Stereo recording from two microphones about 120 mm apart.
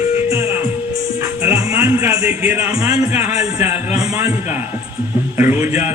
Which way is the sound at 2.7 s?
25° right (ahead or behind).